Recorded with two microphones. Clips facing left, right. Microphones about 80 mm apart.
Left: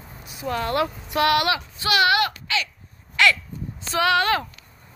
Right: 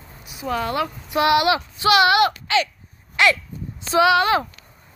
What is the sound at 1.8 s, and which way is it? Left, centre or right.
Speech, right.